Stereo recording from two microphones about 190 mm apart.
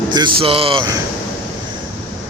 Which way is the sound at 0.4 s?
30° right (ahead or behind).